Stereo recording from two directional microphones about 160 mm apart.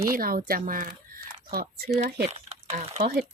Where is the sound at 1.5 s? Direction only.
75° right (ahead or behind).